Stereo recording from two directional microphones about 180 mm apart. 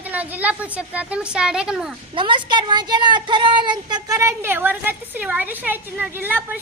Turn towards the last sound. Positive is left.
turn(degrees=-10)  # may be behind; listen again after turning